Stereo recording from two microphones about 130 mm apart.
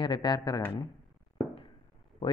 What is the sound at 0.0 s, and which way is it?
Speech, 35° left (ahead or behind).